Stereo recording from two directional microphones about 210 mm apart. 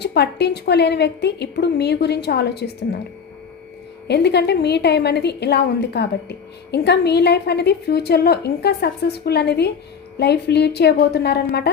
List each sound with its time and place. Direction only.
0.0 s a woman's voice: 50° left (ahead or behind)
4.1 s a woman's voice: 50° left (ahead or behind)